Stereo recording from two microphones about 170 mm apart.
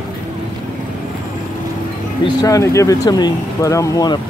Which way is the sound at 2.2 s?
20° left (ahead or behind).